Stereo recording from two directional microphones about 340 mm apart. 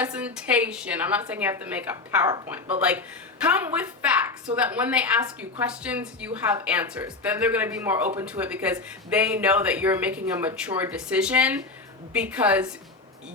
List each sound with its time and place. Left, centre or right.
0.0 s a woman's voice: centre
3.4 s a woman's voice: centre